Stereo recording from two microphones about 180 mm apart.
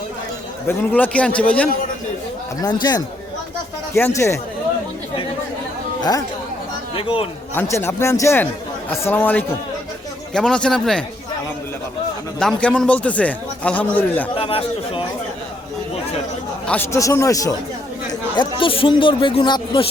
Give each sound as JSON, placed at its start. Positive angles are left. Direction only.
{"t": 0.7, "sound": "a man's voice", "side_deg": 10}
{"t": 2.6, "sound": "a man's voice", "side_deg": 25}
{"t": 6.0, "sound": "a man's voice", "side_deg": 20}
{"t": 7.5, "sound": "a man's voice", "side_deg": 15}
{"t": 12.4, "sound": "a man's voice", "side_deg": 5}
{"t": 14.3, "sound": "chatter", "side_deg": 30}
{"t": 16.6, "sound": "a man's voice", "side_deg": 10}
{"t": 18.3, "sound": "a man's voice", "side_deg": 30}